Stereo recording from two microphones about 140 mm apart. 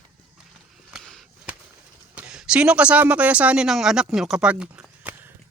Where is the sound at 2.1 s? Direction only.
5° right (ahead or behind).